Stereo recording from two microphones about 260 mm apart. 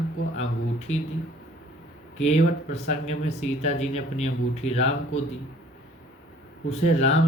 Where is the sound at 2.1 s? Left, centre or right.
Left.